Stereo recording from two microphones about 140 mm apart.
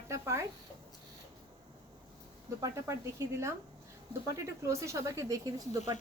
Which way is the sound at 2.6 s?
20° right (ahead or behind).